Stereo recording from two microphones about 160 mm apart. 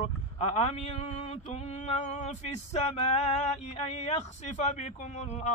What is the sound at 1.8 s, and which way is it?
Male singing, 45° left (ahead or behind).